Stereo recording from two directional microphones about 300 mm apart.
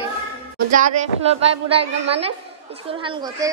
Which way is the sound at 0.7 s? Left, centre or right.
Right.